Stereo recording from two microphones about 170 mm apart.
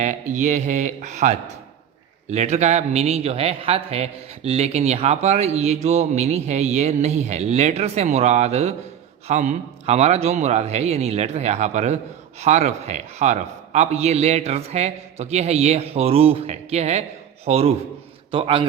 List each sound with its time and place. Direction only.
0.0 s a man's voice: 45° right (ahead or behind); by 18.7 s 30° right (ahead or behind)